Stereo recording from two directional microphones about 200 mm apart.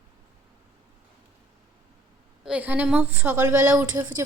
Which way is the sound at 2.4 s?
5° right (ahead or behind).